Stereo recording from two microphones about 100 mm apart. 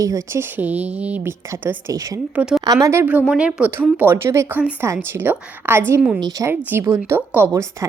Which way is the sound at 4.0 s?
25° right (ahead or behind).